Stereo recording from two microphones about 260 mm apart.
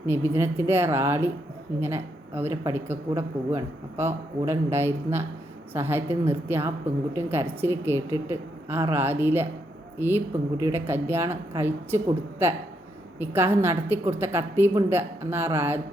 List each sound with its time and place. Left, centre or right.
0.0 s speech: centre